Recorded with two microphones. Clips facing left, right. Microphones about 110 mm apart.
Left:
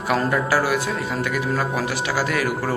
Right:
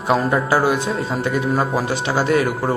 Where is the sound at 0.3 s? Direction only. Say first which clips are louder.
Right 3 dB; 25° right (ahead or behind).